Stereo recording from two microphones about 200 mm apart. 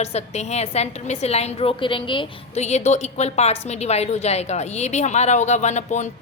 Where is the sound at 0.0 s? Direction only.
35° left (ahead or behind).